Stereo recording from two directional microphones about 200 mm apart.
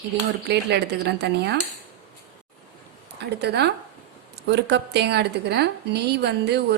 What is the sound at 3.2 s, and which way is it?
A woman's voice, 55° right (ahead or behind).